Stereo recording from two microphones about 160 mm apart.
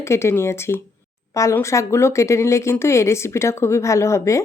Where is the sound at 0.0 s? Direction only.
15° left (ahead or behind).